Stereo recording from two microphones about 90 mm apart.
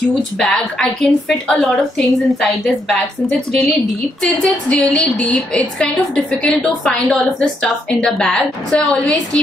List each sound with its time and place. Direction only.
0.4 s a woman's voice: 5° left (ahead or behind)